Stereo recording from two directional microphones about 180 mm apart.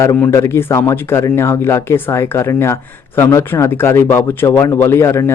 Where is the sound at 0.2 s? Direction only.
15° left (ahead or behind).